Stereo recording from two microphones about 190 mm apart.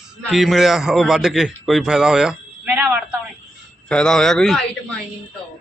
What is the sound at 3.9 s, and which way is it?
A man's voice, 5° left (ahead or behind).